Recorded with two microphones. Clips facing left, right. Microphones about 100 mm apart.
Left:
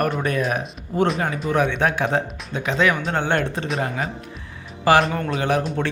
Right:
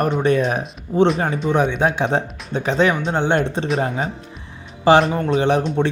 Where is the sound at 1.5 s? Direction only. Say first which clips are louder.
Right 2 dB; 20° right (ahead or behind); by 2.9 s 35° right (ahead or behind).